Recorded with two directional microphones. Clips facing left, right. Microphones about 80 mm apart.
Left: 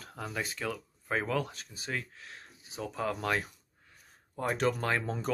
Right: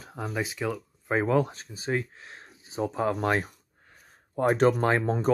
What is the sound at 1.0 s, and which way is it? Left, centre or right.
Speech, right.